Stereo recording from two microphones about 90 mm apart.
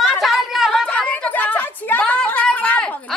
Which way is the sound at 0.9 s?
15° left (ahead or behind).